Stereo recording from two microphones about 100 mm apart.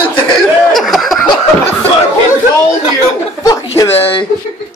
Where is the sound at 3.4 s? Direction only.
35° left (ahead or behind).